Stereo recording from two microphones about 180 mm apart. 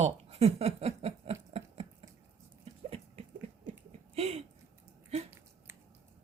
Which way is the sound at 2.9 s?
35° right (ahead or behind).